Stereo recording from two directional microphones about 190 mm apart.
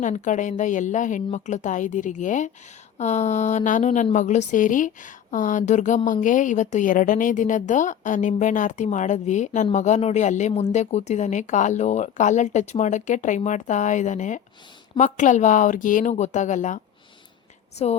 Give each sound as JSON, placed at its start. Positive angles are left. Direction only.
{"t": 0.0, "sound": "speech", "side_deg": 40}